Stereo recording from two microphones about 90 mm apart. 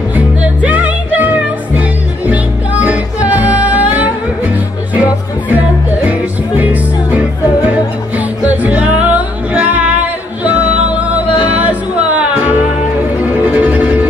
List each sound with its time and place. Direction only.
0.1 s music: 15° right (ahead or behind)